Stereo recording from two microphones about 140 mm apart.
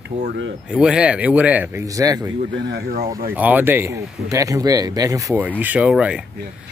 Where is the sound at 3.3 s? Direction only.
10° right (ahead or behind).